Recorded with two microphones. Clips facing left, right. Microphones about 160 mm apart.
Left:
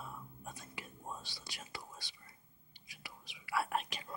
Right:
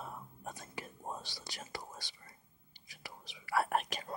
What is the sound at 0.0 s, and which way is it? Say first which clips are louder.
Whispering: right 3 dB; 50° right (ahead or behind).